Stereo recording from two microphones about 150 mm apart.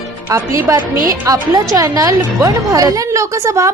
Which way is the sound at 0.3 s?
20° right (ahead or behind).